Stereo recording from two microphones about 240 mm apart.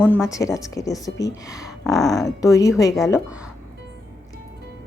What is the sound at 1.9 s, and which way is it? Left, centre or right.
Speech, centre.